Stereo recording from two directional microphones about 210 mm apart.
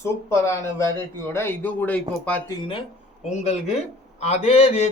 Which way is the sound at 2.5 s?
25° left (ahead or behind).